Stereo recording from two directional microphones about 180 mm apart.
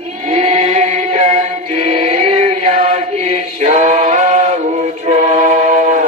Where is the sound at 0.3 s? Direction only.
35° right (ahead or behind).